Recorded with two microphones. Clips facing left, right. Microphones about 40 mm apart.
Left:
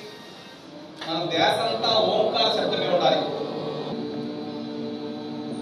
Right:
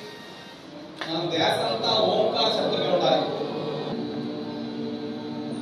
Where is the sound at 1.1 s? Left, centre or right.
Left.